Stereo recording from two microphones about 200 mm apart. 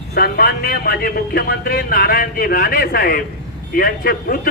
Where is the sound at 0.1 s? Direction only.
50° left (ahead or behind).